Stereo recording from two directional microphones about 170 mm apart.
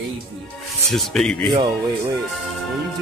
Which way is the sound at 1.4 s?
30° right (ahead or behind).